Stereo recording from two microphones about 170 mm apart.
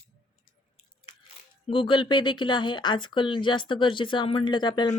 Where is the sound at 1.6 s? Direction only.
30° left (ahead or behind).